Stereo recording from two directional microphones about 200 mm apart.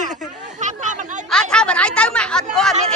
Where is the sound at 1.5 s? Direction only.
5° left (ahead or behind).